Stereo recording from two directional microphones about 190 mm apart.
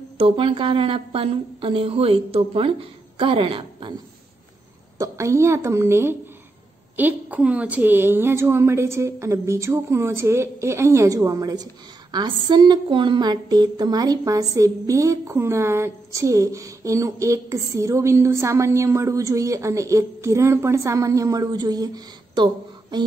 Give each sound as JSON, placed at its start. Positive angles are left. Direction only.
{"t": 0.2, "sound": "a woman's voice", "side_deg": -30}
{"t": 4.9, "sound": "a woman's voice", "side_deg": -15}